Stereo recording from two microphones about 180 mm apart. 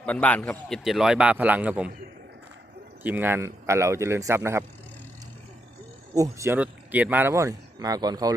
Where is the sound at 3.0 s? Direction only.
10° right (ahead or behind).